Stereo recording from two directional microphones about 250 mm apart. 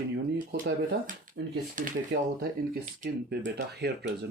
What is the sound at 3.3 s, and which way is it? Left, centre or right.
Speech, right.